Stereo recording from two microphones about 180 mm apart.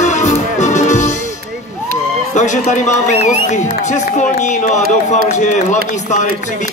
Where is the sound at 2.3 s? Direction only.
40° left (ahead or behind).